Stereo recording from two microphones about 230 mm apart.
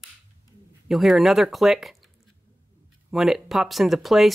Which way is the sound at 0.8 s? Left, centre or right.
Centre.